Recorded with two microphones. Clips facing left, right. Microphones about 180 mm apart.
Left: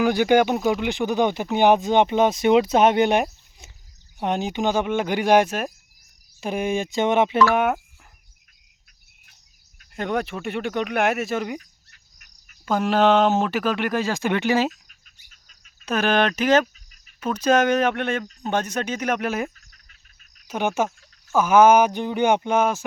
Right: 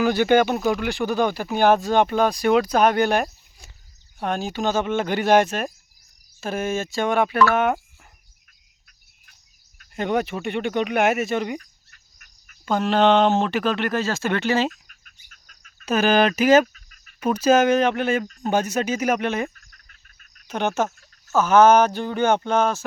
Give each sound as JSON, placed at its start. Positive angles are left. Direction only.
{"t": 0.0, "sound": "speech", "side_deg": 15}
{"t": 7.5, "sound": "speech", "side_deg": 10}
{"t": 9.9, "sound": "speech", "side_deg": 0}
{"t": 11.6, "sound": "fowl", "side_deg": -50}
{"t": 12.6, "sound": "speech", "side_deg": 5}
{"t": 14.7, "sound": "insect", "side_deg": -55}
{"t": 15.9, "sound": "speech", "side_deg": -5}
{"t": 19.5, "sound": "bird", "side_deg": -50}
{"t": 20.5, "sound": "speech", "side_deg": 10}